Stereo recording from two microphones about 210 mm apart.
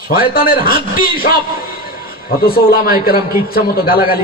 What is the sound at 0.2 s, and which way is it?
A man's voice, 45° left (ahead or behind).